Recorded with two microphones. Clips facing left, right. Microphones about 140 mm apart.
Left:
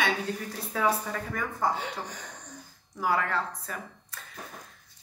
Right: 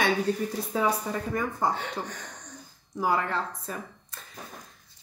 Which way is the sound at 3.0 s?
25° right (ahead or behind).